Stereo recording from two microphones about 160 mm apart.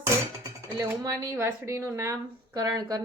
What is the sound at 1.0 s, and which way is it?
A woman's voice, 20° right (ahead or behind).